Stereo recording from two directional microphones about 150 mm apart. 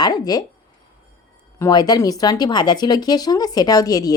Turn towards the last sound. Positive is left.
turn(degrees=25)  # may be behind; listen again after turning